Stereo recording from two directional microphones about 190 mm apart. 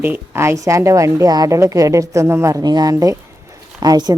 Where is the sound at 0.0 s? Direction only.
10° right (ahead or behind).